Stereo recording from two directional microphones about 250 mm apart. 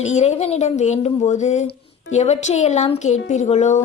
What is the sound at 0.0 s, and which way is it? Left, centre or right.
Speech, left.